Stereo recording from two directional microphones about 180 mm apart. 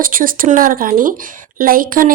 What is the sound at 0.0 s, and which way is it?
Speech, 50° right (ahead or behind).